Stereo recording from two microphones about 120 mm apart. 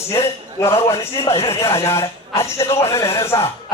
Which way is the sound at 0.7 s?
55° left (ahead or behind).